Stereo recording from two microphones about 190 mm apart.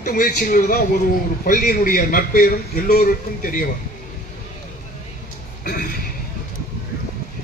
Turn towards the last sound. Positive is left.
turn(degrees=50)  # may be behind; listen again after turning